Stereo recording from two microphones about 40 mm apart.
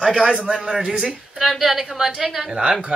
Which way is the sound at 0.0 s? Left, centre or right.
Right.